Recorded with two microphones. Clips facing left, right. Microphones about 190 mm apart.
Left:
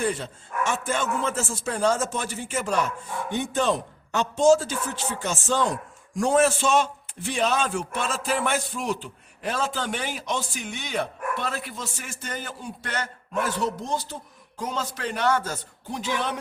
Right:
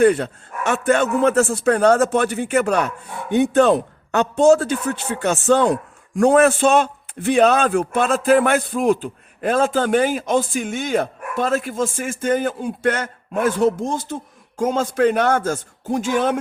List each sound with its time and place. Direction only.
0.0 s a man's voice: 65° right (ahead or behind); by 16.4 s 50° right (ahead or behind)